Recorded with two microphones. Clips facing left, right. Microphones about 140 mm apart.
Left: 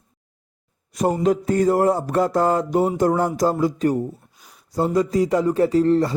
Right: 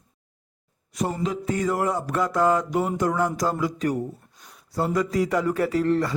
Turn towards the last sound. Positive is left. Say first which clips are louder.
# left 5 dB
turn(degrees=30)  # may be behind; listen again after turning